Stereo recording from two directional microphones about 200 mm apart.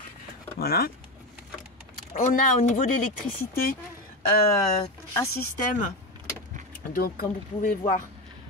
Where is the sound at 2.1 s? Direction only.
40° left (ahead or behind).